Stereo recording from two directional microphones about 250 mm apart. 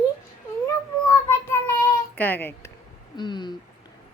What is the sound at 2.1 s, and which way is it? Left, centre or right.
A child's voice, centre.